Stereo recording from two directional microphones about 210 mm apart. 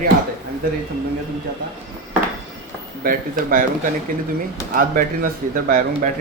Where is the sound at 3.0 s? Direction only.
40° right (ahead or behind).